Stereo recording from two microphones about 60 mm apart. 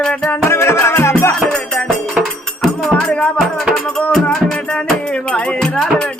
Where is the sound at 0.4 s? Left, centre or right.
Left.